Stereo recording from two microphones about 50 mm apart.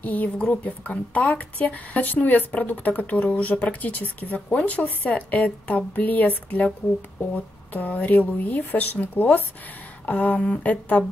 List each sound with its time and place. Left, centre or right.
0.0 s a woman's voice: left
7.7 s a woman's voice: left